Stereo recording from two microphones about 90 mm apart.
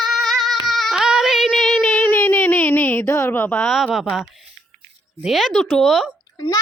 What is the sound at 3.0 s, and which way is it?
Speech, 35° left (ahead or behind).